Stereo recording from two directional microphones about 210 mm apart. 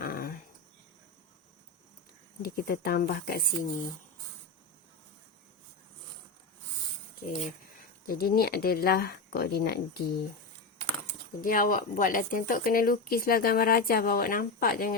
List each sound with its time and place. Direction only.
0.0 s dog: 45° left (ahead or behind)
2.4 s speech: 45° left (ahead or behind)
8.0 s speech: 45° left (ahead or behind)
11.3 s speech: 40° left (ahead or behind)